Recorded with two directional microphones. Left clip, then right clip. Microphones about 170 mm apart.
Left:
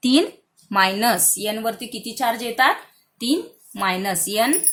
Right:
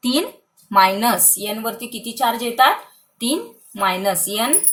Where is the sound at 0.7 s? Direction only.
20° left (ahead or behind).